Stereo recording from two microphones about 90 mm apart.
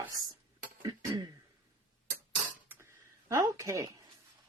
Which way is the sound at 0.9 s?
45° right (ahead or behind).